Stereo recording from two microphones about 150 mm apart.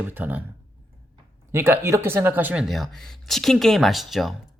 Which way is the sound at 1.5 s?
15° right (ahead or behind).